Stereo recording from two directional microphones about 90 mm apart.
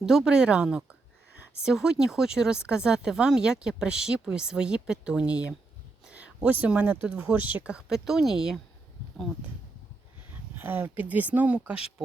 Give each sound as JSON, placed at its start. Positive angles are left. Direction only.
{"t": 0.0, "sound": "speech", "side_deg": -5}
{"t": 10.6, "sound": "speech", "side_deg": -20}